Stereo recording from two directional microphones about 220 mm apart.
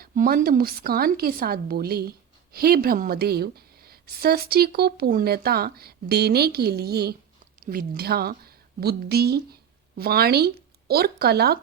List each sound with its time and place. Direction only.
0.0 s speech: 40° right (ahead or behind)